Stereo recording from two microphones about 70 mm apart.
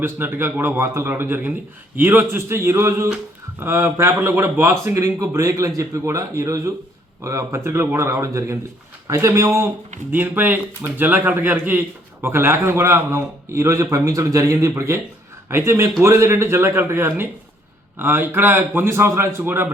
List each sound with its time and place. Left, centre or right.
0.0 s speech: right
10.1 s speech: right
15.4 s a man's voice: right